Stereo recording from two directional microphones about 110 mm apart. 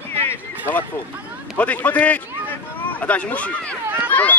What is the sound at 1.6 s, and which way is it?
A man's voice, 15° left (ahead or behind).